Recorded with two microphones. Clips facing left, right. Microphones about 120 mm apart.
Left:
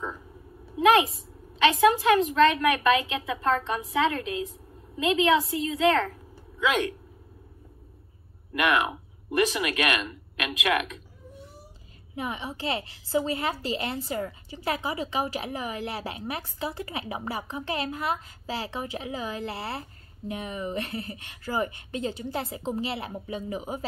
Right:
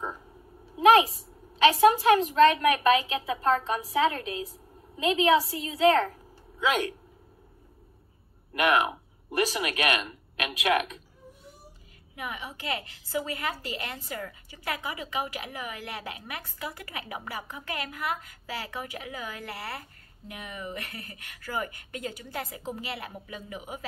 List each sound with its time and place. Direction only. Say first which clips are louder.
1.6 s a woman's voice: right 1 dB; 35° right (ahead or behind)
9.4 s a woman's voice: left 2 dB; 35° right (ahead or behind)
12.2 s a woman's voice: left 5 dB; 30° left (ahead or behind)